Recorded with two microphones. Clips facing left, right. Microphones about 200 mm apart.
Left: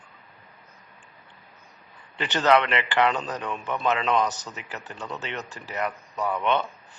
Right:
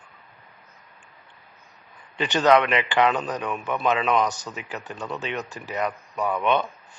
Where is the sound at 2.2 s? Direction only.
15° right (ahead or behind).